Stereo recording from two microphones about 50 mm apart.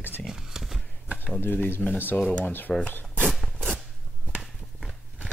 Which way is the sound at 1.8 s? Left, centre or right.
Left.